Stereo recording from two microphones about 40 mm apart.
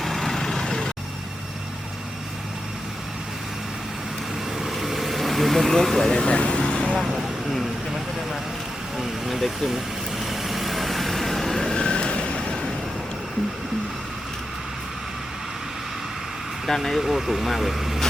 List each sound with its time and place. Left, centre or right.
0.0 s vehicle: centre
4.6 s vehicle: centre
6.2 s vehicle: left
7.0 s vehicle: centre
9.0 s speech: centre
9.6 s vehicle: centre; by 12.4 s left
12.4 s vehicle: centre
16.6 s speech: centre
17.0 s speech: centre